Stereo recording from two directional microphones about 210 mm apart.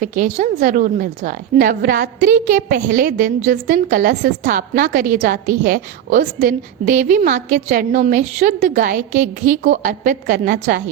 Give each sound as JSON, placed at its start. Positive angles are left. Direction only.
{"t": 0.0, "sound": "a woman's voice", "side_deg": -40}